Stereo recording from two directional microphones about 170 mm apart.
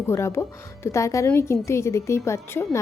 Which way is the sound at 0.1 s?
15° left (ahead or behind).